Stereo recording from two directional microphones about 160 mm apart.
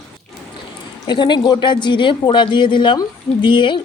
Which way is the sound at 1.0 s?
30° left (ahead or behind).